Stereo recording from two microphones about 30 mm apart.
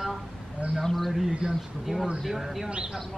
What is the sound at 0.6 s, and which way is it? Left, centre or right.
Speech, right.